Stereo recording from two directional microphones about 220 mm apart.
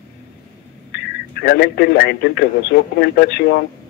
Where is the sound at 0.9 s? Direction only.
50° left (ahead or behind).